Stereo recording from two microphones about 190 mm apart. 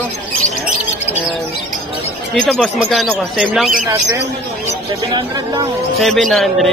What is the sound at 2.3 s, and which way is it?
Speech, 5° left (ahead or behind).